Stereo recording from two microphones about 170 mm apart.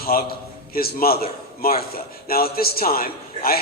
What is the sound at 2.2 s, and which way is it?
A man's voice, 60° left (ahead or behind).